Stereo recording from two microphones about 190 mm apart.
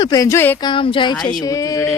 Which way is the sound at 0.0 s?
20° left (ahead or behind).